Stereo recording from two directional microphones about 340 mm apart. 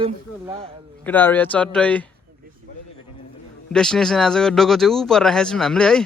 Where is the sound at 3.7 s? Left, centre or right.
Centre.